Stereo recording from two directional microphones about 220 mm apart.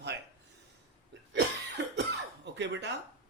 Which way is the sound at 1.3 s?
55° right (ahead or behind).